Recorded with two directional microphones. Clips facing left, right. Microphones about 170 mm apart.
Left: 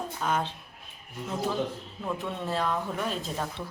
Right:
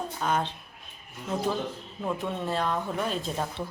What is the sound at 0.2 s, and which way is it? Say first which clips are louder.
Speech: right 1 dB; 5° left (ahead or behind).